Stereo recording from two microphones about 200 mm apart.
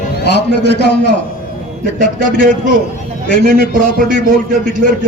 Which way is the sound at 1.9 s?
40° right (ahead or behind).